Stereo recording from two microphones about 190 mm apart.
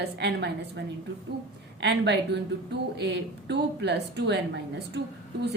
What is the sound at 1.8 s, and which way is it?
A woman's voice, 65° right (ahead or behind).